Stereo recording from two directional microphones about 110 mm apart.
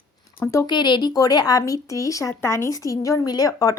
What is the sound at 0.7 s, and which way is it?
A woman's voice, 45° left (ahead or behind).